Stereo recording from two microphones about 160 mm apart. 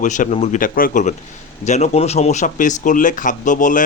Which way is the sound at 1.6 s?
45° left (ahead or behind).